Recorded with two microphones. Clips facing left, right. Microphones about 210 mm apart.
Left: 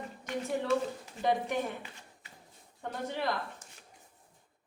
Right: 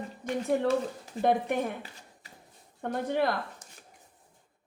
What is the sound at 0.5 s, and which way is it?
A woman's voice, 50° right (ahead or behind).